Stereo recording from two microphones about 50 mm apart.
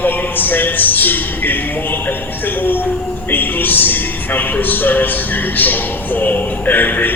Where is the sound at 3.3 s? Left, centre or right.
Left.